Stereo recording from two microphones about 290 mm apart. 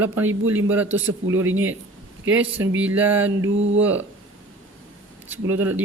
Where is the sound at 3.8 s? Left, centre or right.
Centre.